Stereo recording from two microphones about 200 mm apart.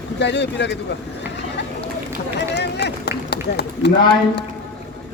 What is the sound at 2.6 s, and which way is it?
Run, 55° left (ahead or behind).